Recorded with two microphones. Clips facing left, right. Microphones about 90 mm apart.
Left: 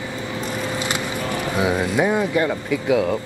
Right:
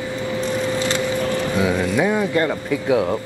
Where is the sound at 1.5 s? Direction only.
20° left (ahead or behind).